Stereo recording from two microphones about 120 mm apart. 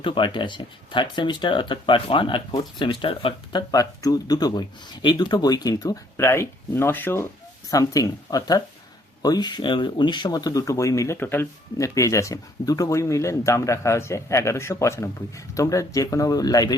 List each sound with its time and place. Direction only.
0.0 s speech: 45° left (ahead or behind)
3.7 s speech: 30° left (ahead or behind)
7.7 s speech: 30° left (ahead or behind)